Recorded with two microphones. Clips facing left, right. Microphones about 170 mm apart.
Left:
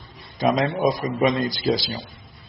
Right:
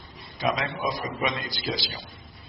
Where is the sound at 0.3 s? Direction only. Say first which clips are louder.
Left 7 dB; 40° left (ahead or behind).